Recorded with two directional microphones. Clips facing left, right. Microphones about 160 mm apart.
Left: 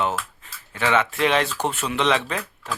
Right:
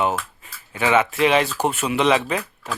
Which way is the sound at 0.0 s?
10° right (ahead or behind).